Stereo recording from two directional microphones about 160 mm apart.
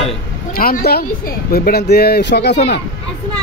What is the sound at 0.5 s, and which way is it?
Speech, 70° left (ahead or behind).